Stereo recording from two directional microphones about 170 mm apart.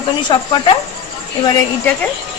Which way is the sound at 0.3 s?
30° left (ahead or behind).